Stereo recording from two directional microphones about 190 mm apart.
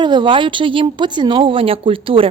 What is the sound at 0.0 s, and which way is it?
A woman's voice, 25° right (ahead or behind).